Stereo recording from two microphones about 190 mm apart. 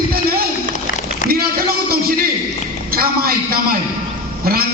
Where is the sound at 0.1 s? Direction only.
50° right (ahead or behind).